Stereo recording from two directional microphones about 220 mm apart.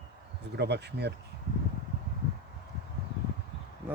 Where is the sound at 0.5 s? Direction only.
50° right (ahead or behind).